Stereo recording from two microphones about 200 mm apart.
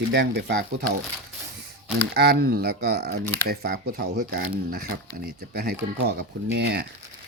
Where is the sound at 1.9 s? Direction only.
50° right (ahead or behind).